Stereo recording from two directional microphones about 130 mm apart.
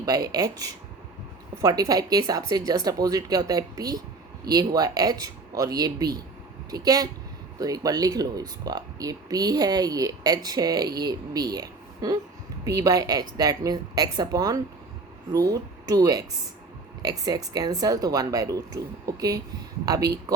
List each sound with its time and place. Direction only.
0.0 s speech: 30° right (ahead or behind)